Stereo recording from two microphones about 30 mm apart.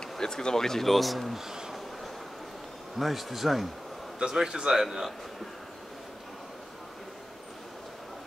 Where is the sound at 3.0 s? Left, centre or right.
Centre.